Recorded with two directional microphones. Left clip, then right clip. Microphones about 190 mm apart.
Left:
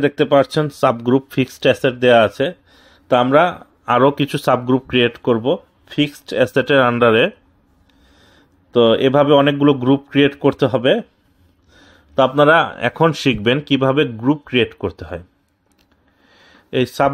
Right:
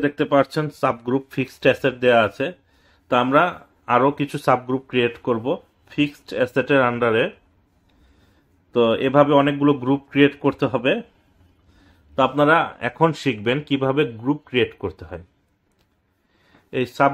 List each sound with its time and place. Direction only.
0.0 s speech: 35° left (ahead or behind)
8.7 s speech: 35° left (ahead or behind)
16.7 s speech: 30° left (ahead or behind)